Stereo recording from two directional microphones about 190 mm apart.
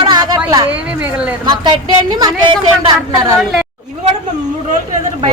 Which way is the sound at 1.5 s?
20° right (ahead or behind).